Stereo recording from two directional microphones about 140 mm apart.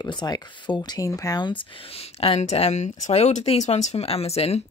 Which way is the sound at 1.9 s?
45° left (ahead or behind).